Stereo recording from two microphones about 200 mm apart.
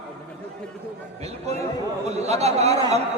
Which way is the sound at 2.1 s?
35° right (ahead or behind).